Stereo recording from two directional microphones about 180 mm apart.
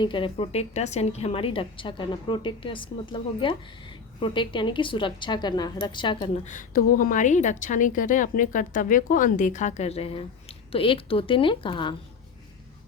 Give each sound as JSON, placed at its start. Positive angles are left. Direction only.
{"t": 0.0, "sound": "a woman's voice", "side_deg": 25}